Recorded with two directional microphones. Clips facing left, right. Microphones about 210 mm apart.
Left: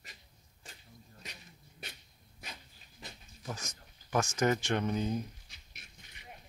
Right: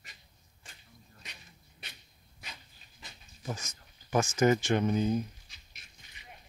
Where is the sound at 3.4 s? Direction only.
Centre (ahead or behind).